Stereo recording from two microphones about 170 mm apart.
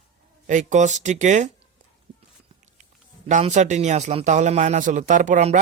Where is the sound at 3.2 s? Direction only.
45° right (ahead or behind).